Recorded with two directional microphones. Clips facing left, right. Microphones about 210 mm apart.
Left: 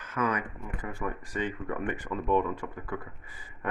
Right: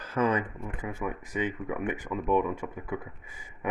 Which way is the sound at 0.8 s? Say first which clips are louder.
Right 1 dB; 10° right (ahead or behind).